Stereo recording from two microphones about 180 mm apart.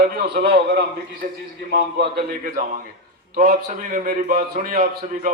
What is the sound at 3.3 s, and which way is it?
A man's voice, 45° right (ahead or behind).